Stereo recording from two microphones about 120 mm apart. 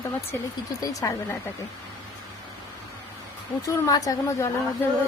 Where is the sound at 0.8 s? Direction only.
30° left (ahead or behind).